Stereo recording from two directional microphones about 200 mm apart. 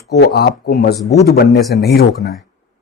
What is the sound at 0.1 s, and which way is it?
A man's voice, 55° left (ahead or behind).